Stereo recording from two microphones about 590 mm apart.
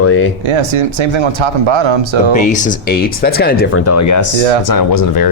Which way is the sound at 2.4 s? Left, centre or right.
Centre.